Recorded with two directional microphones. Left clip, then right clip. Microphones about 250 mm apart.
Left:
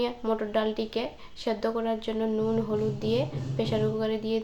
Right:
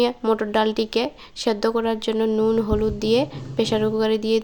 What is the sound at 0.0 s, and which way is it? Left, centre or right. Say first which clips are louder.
Speech: right 8 dB; right.